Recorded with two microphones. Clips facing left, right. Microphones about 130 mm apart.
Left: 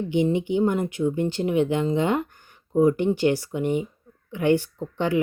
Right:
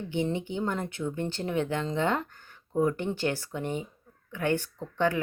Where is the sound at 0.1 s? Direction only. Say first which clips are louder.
Left 7 dB; 15° left (ahead or behind).